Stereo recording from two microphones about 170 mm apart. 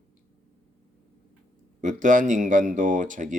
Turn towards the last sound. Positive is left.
turn(degrees=-50)  # may be behind; listen again after turning